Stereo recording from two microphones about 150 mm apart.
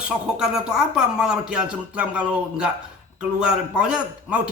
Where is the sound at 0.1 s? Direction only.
5° right (ahead or behind).